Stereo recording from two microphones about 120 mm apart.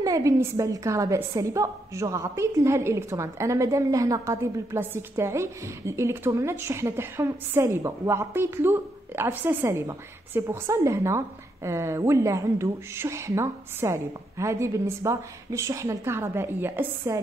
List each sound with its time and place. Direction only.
0.0 s a woman's voice: 30° right (ahead or behind)